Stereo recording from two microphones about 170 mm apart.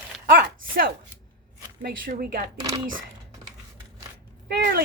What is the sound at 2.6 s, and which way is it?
Speech, 25° right (ahead or behind).